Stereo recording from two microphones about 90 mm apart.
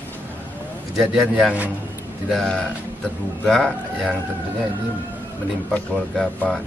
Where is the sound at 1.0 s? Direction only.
Centre (ahead or behind).